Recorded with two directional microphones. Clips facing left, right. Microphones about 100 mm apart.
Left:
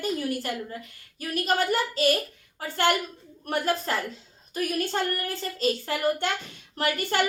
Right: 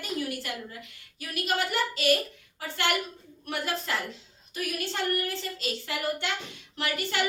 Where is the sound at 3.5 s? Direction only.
40° left (ahead or behind).